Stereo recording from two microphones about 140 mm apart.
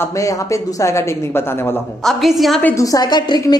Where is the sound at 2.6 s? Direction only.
25° left (ahead or behind).